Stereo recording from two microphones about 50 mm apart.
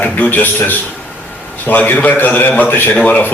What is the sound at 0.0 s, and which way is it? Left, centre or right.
A man's voice, left.